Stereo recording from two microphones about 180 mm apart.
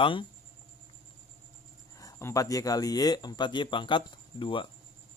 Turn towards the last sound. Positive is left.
turn(degrees=30)  # may be behind; listen again after turning